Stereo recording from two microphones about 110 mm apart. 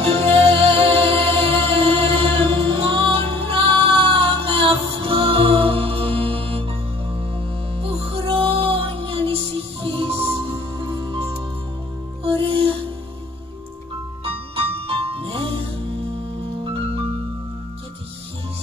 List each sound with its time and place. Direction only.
0.0 s music: 60° right (ahead or behind)
7.8 s music: 55° right (ahead or behind)
10.9 s music: 50° right (ahead or behind)
14.2 s music: 60° right (ahead or behind)